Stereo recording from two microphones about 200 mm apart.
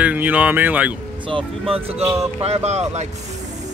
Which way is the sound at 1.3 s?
25° right (ahead or behind).